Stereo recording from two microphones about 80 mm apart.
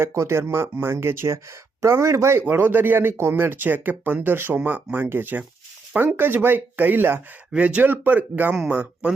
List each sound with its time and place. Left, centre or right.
0.0 s speech: right
2.5 s speech: right
7.5 s speech: centre